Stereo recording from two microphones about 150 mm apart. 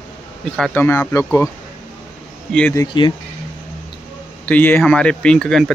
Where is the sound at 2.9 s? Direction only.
30° left (ahead or behind).